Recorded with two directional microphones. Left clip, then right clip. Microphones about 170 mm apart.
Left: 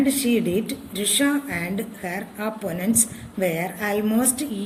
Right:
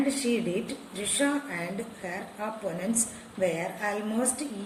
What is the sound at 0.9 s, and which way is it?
A woman's voice, 55° left (ahead or behind).